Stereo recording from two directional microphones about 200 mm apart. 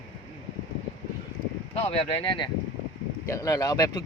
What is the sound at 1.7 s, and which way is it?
Speech, 30° left (ahead or behind).